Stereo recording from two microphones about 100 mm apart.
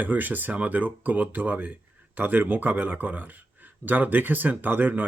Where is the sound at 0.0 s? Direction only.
15° right (ahead or behind).